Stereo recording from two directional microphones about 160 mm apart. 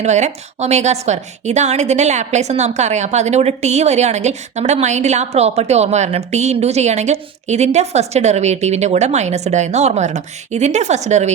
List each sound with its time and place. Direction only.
0.0 s a woman's voice: 45° right (ahead or behind)